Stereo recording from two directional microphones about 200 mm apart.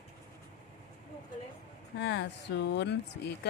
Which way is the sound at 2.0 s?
60° left (ahead or behind).